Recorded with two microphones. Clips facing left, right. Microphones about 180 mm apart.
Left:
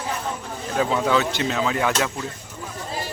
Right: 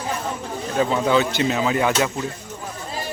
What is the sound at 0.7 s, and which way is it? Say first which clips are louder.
Speech: right 2 dB; centre (ahead or behind).